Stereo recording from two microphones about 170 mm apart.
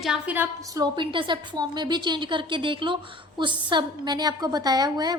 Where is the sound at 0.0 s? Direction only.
5° right (ahead or behind).